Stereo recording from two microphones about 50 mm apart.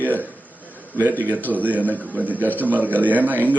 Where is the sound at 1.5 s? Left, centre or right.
Right.